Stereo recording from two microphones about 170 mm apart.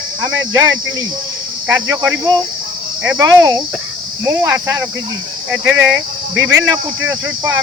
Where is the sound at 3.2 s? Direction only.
20° right (ahead or behind).